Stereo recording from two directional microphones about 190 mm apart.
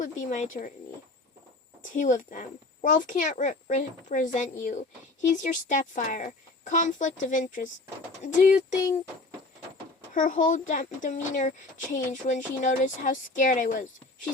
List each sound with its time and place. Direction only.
0.0 s speech: 40° left (ahead or behind)
1.8 s speech: 40° left (ahead or behind)
10.2 s speech: 40° left (ahead or behind)